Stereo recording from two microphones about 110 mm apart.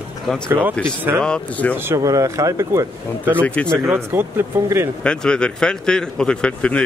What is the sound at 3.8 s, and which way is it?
Speech, 20° right (ahead or behind).